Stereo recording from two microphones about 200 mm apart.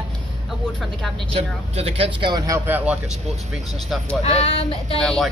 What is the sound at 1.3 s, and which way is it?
Speech, 30° right (ahead or behind).